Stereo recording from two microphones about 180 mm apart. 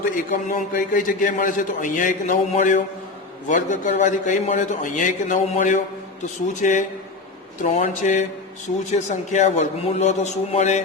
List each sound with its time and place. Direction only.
0.3 s a man's voice: 50° left (ahead or behind)